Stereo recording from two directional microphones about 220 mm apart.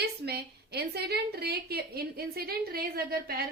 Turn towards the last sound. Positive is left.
turn(degrees=-45)  # may be behind; listen again after turning